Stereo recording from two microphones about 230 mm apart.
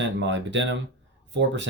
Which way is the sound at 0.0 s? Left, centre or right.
Right.